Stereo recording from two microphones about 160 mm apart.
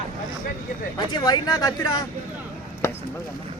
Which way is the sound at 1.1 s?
25° left (ahead or behind).